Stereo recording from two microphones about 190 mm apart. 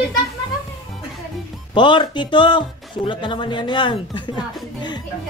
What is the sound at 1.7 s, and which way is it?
Speech, 25° left (ahead or behind).